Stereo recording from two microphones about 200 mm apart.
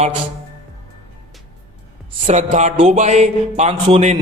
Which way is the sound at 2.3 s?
35° right (ahead or behind).